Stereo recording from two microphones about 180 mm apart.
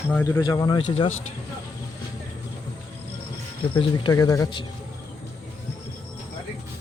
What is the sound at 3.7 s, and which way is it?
Speech, 30° left (ahead or behind).